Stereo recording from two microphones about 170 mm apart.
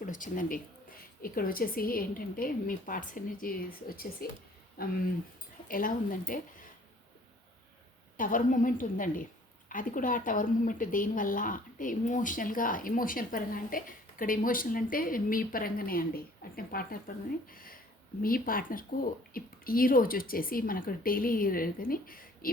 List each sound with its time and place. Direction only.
0.0 s speech: 50° left (ahead or behind)
8.1 s a woman's voice: 50° left (ahead or behind)